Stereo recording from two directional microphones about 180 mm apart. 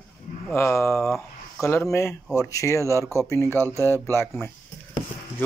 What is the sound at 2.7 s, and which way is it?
Speech, 15° right (ahead or behind).